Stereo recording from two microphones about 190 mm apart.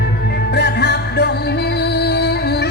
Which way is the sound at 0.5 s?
60° left (ahead or behind).